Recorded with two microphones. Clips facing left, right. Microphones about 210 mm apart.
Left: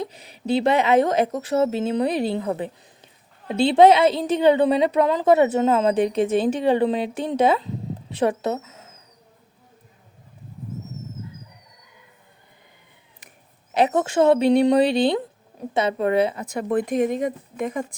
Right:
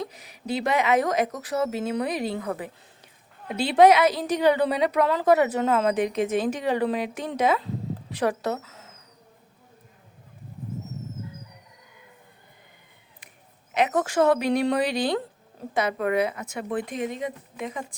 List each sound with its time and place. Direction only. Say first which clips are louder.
0.0 s a woman's voice: left 4 dB; 30° left (ahead or behind)
13.7 s a woman's voice: left 3 dB; 30° left (ahead or behind); by 17.8 s 50° left (ahead or behind)